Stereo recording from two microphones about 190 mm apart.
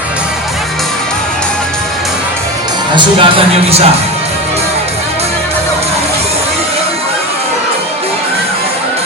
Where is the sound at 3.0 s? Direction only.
25° right (ahead or behind).